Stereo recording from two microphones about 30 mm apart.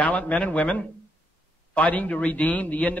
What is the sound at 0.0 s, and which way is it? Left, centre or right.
A man's voice, left.